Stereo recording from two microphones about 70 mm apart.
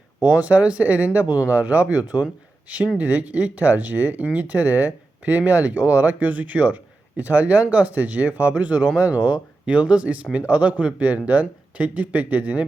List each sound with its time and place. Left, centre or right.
0.2 s speech: centre